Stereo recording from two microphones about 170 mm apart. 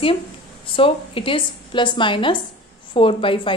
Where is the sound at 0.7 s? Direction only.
30° left (ahead or behind).